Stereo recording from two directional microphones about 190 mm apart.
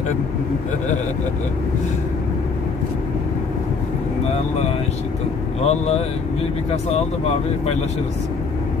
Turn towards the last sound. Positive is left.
turn(degrees=35)  # may be behind; listen again after turning